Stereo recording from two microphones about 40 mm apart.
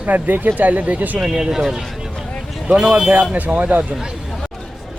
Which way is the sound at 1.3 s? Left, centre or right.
Centre.